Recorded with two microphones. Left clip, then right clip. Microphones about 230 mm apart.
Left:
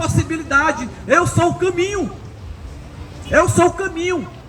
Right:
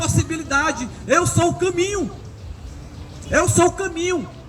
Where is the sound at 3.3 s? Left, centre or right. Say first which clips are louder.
Left 3 dB; right.